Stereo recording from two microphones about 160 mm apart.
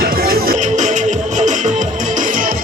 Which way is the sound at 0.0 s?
70° right (ahead or behind).